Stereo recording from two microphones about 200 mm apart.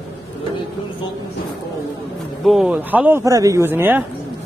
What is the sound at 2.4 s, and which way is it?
Speech, centre (ahead or behind).